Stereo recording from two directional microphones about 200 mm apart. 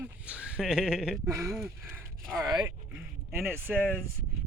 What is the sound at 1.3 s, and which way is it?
Speech, 15° right (ahead or behind).